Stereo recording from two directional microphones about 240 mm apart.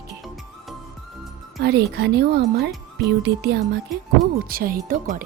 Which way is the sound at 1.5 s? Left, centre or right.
Right.